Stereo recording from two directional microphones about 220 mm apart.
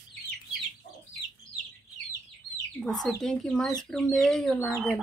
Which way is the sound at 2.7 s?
Centre (ahead or behind).